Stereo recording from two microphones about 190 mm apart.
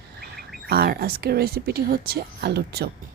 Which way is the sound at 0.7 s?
55° right (ahead or behind).